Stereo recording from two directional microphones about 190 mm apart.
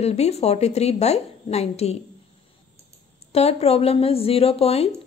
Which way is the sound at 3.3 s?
30° left (ahead or behind).